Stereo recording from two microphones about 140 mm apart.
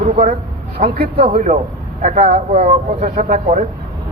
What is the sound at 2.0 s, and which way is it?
Speech, 50° right (ahead or behind).